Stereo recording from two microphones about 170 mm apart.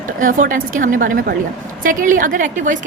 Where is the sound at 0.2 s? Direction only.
50° right (ahead or behind).